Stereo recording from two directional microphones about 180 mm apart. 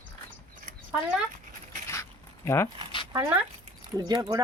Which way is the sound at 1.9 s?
15° left (ahead or behind).